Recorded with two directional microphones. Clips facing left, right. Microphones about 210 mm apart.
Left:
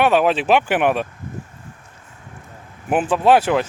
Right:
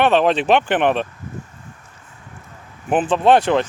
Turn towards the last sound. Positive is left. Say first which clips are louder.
# right 1 dB
turn(degrees=5)  # may be behind; listen again after turning